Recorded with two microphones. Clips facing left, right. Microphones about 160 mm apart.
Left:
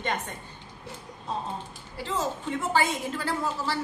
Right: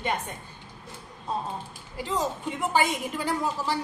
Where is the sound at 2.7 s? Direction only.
15° right (ahead or behind).